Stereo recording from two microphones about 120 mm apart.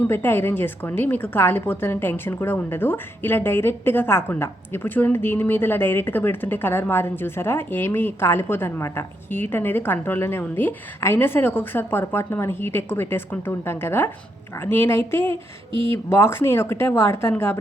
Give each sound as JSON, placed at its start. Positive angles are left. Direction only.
{"t": 0.0, "sound": "a woman's voice", "side_deg": 20}